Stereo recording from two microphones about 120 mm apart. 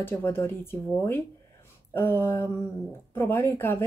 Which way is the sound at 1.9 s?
20° left (ahead or behind).